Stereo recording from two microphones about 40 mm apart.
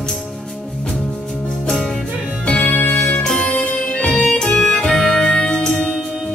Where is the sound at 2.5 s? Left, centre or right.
Left.